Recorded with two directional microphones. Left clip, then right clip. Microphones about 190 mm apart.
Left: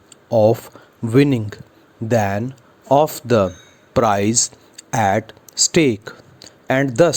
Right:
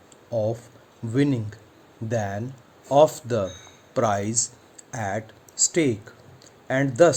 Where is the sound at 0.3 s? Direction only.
45° left (ahead or behind).